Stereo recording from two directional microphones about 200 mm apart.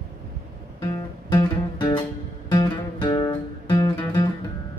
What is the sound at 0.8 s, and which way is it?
Music, 20° left (ahead or behind).